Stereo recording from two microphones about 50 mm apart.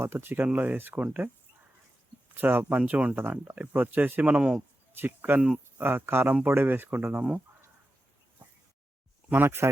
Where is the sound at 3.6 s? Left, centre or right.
Right.